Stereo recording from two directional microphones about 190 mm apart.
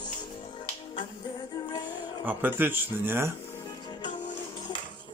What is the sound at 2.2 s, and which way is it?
Speech, 10° right (ahead or behind).